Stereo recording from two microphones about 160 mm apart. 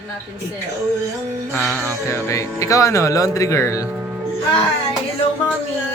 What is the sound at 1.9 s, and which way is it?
Speech, 20° left (ahead or behind).